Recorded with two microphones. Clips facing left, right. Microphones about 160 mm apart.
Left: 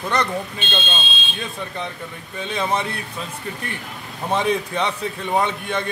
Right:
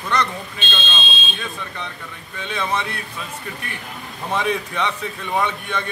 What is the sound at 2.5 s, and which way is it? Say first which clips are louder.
Speech: left 1 dB; 30° left (ahead or behind).